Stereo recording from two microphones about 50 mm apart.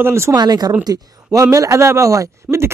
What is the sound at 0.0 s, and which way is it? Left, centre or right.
Speech, right.